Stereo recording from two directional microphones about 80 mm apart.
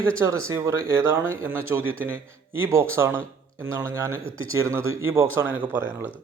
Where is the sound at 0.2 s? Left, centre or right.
Right.